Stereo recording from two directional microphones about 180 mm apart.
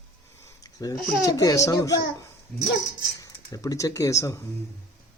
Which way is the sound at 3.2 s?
20° left (ahead or behind).